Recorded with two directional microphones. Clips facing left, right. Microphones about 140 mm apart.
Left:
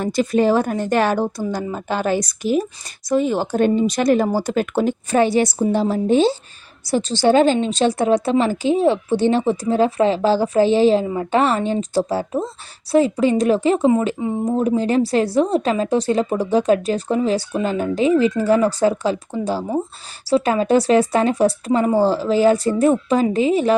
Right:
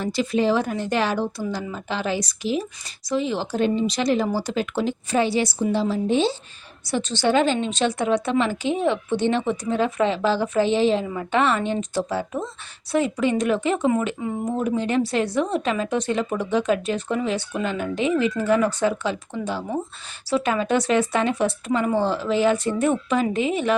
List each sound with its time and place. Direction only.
0.0 s a woman's voice: 45° left (ahead or behind)